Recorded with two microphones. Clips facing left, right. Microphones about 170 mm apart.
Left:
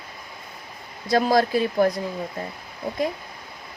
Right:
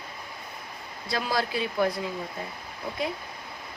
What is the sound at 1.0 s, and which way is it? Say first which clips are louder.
Speech: left 9 dB; 45° left (ahead or behind).